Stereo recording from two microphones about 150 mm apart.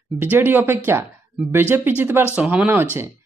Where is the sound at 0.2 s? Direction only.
15° right (ahead or behind).